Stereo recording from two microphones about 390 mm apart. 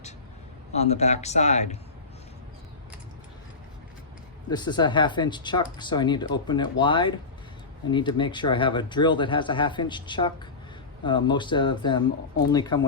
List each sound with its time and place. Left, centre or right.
0.8 s speech: centre
4.4 s speech: centre